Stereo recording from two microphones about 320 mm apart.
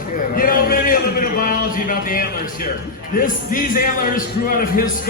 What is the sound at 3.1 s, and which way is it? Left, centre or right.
A man's voice, left.